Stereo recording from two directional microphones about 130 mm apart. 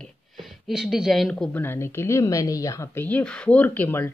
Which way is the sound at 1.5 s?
15° left (ahead or behind).